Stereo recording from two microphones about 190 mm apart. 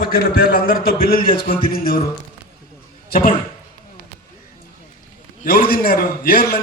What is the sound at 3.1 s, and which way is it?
Speech, 45° left (ahead or behind).